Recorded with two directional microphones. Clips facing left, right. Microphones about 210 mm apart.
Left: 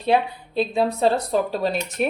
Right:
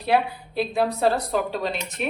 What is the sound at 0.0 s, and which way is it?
A woman's voice, 25° left (ahead or behind).